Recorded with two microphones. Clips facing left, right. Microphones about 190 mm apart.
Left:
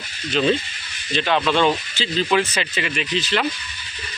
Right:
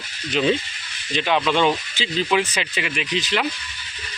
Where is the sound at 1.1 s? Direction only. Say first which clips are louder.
Left 1 dB; 10° right (ahead or behind).